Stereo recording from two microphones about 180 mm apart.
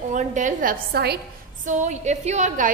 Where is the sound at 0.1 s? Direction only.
45° right (ahead or behind); by 1.2 s 65° right (ahead or behind).